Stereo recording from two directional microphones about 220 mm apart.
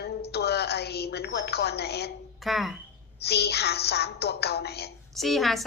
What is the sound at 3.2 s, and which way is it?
Speech, 45° left (ahead or behind).